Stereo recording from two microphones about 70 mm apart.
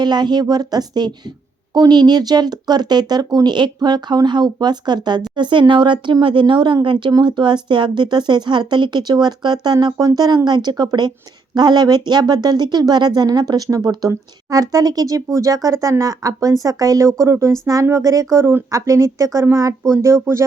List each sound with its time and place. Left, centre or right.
0.0 s speech: right
6.7 s speech: right
10.2 s speech: right
17.9 s speech: right
18.9 s speech: right
19.9 s speech: right